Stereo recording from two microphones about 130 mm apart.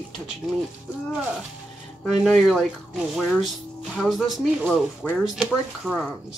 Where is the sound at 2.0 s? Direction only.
Centre (ahead or behind).